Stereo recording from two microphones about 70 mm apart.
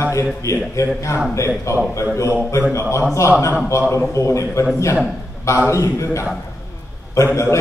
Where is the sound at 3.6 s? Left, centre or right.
Left.